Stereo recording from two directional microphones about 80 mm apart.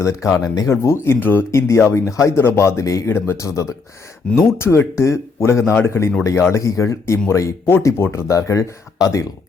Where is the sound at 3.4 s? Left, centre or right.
Left.